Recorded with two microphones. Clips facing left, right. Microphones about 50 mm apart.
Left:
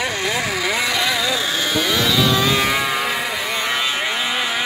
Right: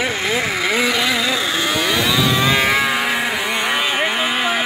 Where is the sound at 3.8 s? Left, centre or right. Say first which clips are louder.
Right 3 dB; right.